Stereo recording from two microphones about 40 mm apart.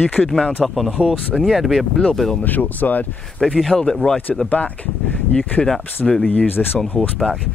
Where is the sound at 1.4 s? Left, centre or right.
Centre.